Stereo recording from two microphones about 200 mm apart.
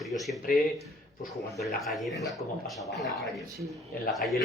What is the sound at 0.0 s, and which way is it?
Speech, centre (ahead or behind).